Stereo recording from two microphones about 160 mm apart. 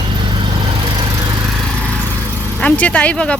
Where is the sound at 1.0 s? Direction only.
25° right (ahead or behind).